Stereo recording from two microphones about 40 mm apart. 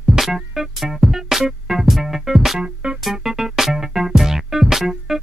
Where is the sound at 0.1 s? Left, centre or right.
Centre.